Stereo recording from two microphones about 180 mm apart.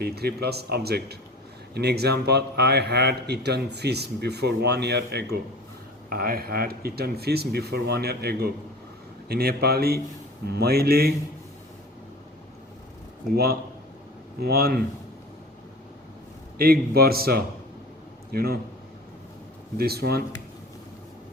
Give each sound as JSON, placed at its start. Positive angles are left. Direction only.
{"t": 0.0, "sound": "a man's voice", "side_deg": -60}
{"t": 6.1, "sound": "a man's voice", "side_deg": -55}
{"t": 13.3, "sound": "a man's voice", "side_deg": -60}
{"t": 16.6, "sound": "a man's voice", "side_deg": -60}
{"t": 19.7, "sound": "a man's voice", "side_deg": -60}